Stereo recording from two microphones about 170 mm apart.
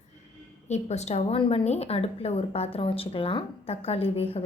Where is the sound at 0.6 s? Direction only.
40° left (ahead or behind).